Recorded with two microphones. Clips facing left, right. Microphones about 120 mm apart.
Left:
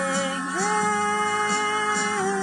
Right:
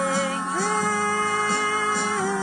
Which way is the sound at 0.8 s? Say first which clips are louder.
Left 1 dB; 5° right (ahead or behind).